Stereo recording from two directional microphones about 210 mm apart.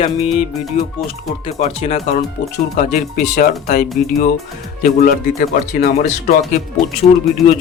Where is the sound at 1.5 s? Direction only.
30° left (ahead or behind).